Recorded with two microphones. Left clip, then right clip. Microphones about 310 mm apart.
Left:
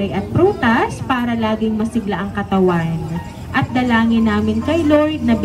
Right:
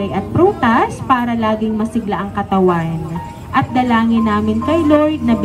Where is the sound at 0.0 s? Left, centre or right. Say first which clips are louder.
Right 2 dB; right.